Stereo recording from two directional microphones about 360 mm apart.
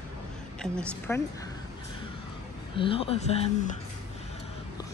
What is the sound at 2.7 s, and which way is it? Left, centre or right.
Speech, centre.